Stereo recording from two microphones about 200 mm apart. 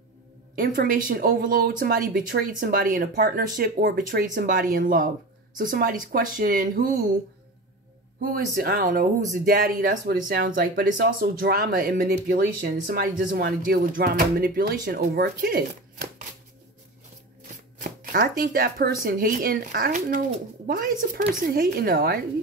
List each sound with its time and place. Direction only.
0.6 s speech: 45° right (ahead or behind)
8.3 s speech: 45° right (ahead or behind)
18.1 s speech: 45° right (ahead or behind)